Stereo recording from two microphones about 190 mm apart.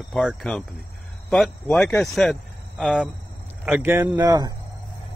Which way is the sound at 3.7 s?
10° right (ahead or behind).